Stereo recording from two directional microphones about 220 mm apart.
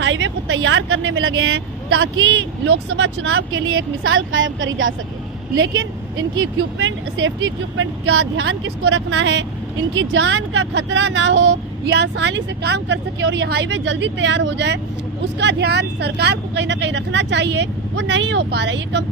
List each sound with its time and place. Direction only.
0.0 s speech: 55° right (ahead or behind)